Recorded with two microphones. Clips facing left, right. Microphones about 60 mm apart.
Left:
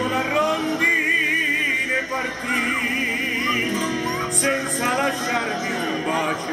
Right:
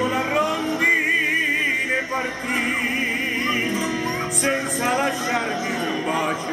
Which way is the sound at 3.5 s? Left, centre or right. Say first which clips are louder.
Even; centre.